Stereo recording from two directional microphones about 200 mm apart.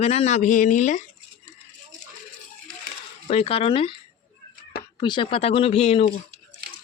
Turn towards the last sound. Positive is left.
turn(degrees=30)  # may be behind; listen again after turning